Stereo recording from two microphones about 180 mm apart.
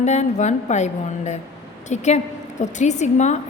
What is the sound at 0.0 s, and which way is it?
A woman's voice, 40° left (ahead or behind).